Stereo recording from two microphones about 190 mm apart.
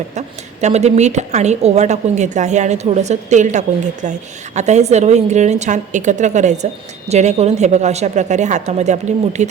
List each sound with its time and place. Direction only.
0.1 s a woman's voice: 35° right (ahead or behind)